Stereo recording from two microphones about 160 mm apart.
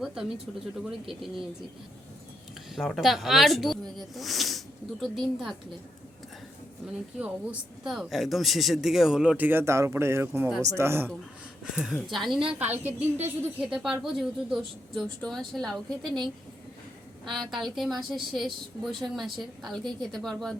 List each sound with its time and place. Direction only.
0.0 s pigeon: centre (ahead or behind)
0.9 s a woman's voice: centre (ahead or behind)
2.7 s a woman's voice: centre (ahead or behind)
6.8 s a woman's voice: 10° right (ahead or behind)
11.6 s a woman's voice: centre (ahead or behind)
17.2 s a woman's voice: centre (ahead or behind)